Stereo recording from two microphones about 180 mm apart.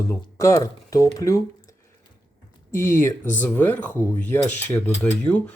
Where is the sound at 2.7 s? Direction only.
15° left (ahead or behind).